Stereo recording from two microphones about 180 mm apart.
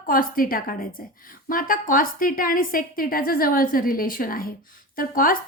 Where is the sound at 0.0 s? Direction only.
50° left (ahead or behind).